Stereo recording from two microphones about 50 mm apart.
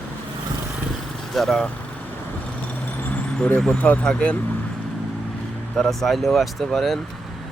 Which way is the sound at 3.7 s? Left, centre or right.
Left.